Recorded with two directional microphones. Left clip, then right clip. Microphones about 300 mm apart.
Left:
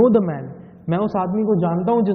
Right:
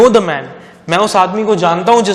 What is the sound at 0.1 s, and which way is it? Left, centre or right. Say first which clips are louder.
A man's voice: right 8 dB; centre.